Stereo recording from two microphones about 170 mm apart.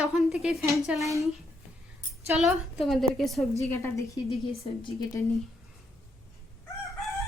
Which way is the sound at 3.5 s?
15° left (ahead or behind).